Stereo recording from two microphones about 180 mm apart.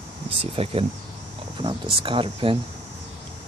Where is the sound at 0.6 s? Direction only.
30° right (ahead or behind).